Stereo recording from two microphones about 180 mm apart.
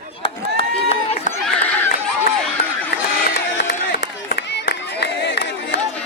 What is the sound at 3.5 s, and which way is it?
Crowd, 75° left (ahead or behind).